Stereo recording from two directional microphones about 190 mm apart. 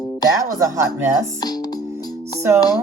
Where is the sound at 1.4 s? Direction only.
20° left (ahead or behind).